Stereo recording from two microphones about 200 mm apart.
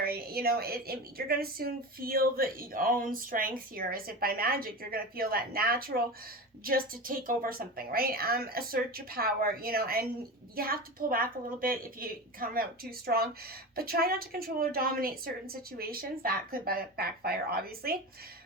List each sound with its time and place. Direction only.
0.0 s a woman's voice: 50° right (ahead or behind)